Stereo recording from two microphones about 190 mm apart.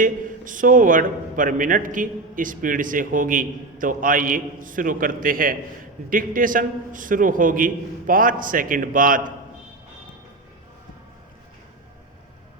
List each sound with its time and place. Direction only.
0.0 s a man's voice: 45° right (ahead or behind)